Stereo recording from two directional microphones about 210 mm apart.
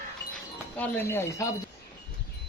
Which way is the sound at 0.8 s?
10° left (ahead or behind).